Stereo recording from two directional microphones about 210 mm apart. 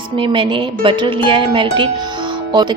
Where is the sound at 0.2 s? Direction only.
25° right (ahead or behind).